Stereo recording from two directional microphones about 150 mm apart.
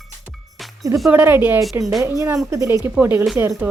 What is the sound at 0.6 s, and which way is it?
Music, centre (ahead or behind).